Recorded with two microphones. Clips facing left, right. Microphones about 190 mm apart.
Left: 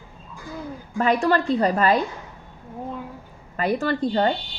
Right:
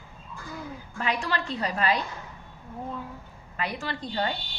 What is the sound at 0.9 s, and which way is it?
A woman's voice, 45° left (ahead or behind).